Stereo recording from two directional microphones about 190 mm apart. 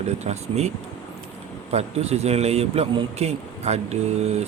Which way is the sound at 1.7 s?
35° right (ahead or behind).